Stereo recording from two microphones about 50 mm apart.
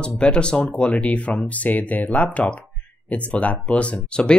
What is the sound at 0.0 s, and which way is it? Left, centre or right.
Speech, centre.